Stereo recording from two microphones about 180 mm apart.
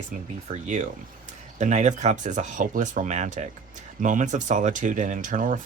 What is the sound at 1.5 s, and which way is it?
Speech, 40° right (ahead or behind).